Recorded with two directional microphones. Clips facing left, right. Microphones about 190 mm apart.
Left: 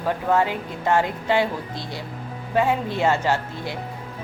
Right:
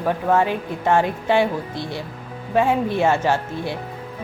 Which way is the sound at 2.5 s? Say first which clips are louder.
Right 3 dB; 20° right (ahead or behind).